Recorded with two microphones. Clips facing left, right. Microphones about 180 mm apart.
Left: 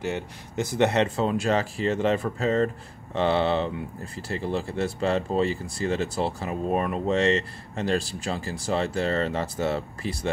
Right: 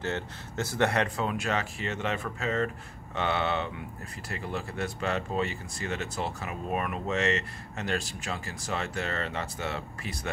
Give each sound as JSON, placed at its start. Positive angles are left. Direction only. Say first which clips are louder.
{"t": 0.0, "sound": "speech", "louder": "left 3 dB", "side_deg": 15}